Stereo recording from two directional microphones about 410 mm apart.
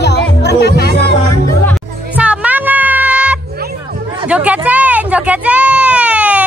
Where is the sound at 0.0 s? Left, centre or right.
Left.